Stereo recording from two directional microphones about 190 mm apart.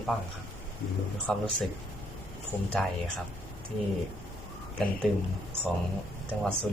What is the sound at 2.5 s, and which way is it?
Speech, 10° right (ahead or behind).